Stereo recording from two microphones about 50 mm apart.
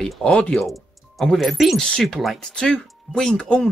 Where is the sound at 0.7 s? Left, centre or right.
Centre.